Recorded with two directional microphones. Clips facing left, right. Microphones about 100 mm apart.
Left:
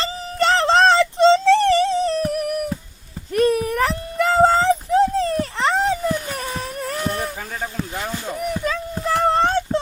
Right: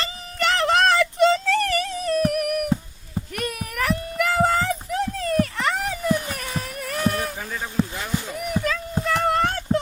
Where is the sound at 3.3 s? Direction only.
30° left (ahead or behind).